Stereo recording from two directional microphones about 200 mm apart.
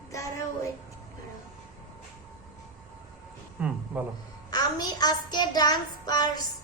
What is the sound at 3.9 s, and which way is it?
Speech, 5° right (ahead or behind).